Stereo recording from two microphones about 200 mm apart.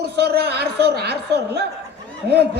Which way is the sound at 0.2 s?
55° right (ahead or behind).